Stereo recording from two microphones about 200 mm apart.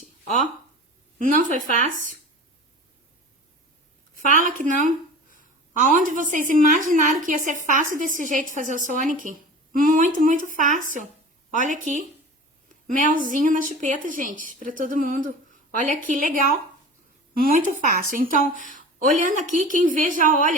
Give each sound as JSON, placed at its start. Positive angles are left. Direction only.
{"t": 1.2, "sound": "a woman's voice", "side_deg": -40}
{"t": 4.1, "sound": "a woman's voice", "side_deg": -40}
{"t": 17.3, "sound": "a woman's voice", "side_deg": -45}